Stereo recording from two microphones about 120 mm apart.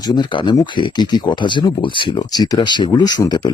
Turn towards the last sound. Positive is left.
turn(degrees=35)  # may be behind; listen again after turning